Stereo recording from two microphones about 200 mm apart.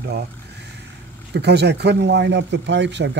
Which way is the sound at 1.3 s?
55° right (ahead or behind).